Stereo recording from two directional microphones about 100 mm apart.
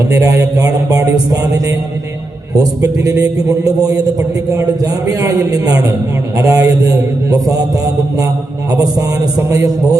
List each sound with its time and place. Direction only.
0.1 s a man's voice: 30° right (ahead or behind)
9.5 s a man's voice: 35° right (ahead or behind)